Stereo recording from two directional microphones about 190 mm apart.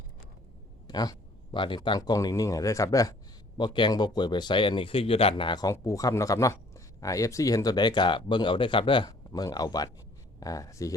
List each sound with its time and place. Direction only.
0.9 s speech: 20° left (ahead or behind)